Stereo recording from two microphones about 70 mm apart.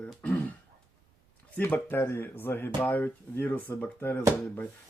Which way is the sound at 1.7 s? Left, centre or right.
Left.